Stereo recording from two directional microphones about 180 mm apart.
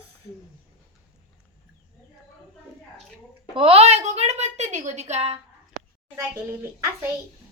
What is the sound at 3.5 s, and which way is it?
A woman's voice, 30° right (ahead or behind).